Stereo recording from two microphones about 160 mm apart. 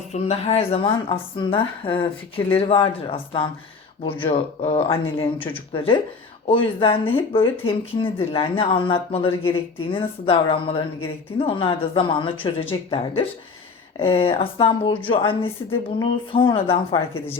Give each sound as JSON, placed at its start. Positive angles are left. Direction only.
{"t": 0.1, "sound": "speech", "side_deg": 40}